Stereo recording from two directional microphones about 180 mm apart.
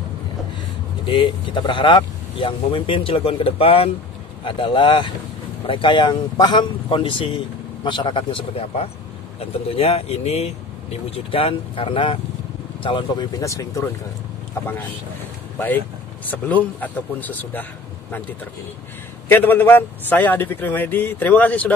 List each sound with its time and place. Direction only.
1.0 s speech: 25° left (ahead or behind)
16.3 s a man's voice: 10° left (ahead or behind)
19.2 s a man's voice: 10° left (ahead or behind)